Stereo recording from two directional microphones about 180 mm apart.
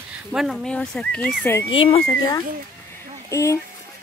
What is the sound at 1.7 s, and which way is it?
Speech, 30° left (ahead or behind).